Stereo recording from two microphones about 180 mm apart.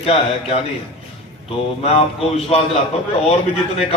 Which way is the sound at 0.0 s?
30° left (ahead or behind).